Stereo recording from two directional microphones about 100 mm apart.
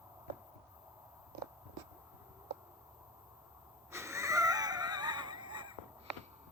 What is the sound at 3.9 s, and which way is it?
Wheeze, 30° right (ahead or behind).